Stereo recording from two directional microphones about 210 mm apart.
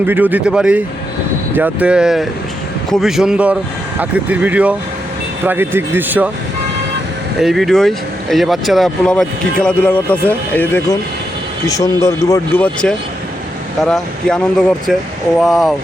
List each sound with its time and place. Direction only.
0.0 s speech: 10° right (ahead or behind)
7.3 s speech: centre (ahead or behind)